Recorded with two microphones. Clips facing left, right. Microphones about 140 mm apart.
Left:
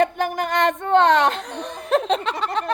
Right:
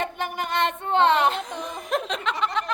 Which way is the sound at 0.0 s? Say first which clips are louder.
Left 8 dB; 45° left (ahead or behind).